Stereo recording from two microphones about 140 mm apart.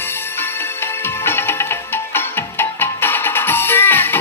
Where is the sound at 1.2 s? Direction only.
15° left (ahead or behind).